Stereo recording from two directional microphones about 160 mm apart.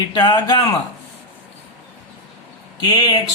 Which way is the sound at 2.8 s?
25° left (ahead or behind).